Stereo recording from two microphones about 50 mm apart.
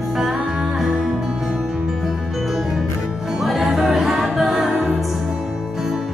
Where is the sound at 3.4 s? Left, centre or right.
Centre.